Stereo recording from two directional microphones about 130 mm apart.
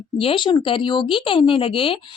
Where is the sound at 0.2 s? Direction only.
40° left (ahead or behind).